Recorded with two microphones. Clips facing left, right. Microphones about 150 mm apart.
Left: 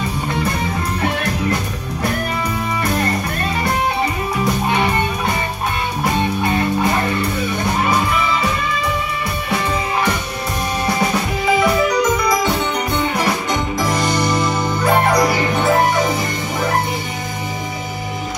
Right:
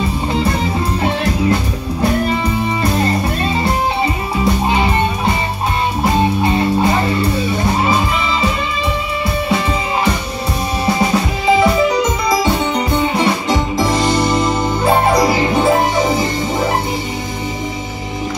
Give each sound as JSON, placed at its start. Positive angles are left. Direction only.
{"t": 2.8, "sound": "music", "side_deg": -25}
{"t": 4.6, "sound": "music", "side_deg": -25}
{"t": 6.4, "sound": "music", "side_deg": -25}
{"t": 11.4, "sound": "music", "side_deg": -25}